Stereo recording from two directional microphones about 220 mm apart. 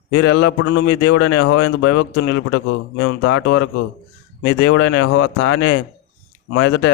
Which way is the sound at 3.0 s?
70° left (ahead or behind).